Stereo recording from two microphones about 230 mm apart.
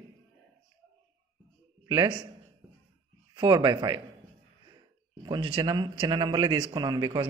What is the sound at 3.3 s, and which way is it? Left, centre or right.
Speech, centre.